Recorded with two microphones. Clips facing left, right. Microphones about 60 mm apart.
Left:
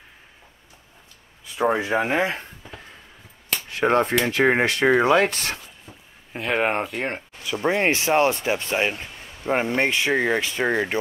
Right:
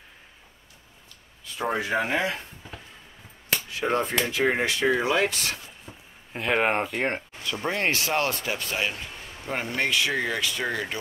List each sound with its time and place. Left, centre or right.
1.4 s speech: centre
3.7 s speech: left
5.9 s a sound: right
6.3 s speech: centre
7.4 s speech: centre